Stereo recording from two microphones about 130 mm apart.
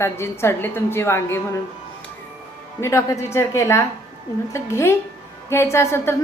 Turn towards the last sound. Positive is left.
turn(degrees=20)  # may be behind; listen again after turning